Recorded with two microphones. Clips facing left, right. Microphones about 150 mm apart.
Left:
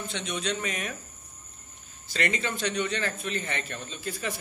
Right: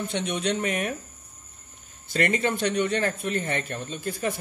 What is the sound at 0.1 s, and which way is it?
Speech, 55° right (ahead or behind).